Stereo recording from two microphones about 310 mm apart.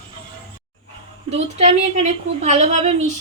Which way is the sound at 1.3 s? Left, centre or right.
Centre.